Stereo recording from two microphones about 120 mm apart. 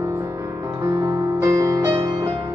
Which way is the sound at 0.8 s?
25° right (ahead or behind).